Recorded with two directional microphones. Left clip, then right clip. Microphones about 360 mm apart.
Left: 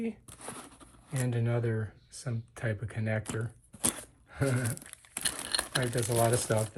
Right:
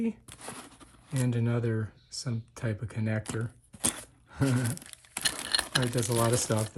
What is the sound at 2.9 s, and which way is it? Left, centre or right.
Speech, centre.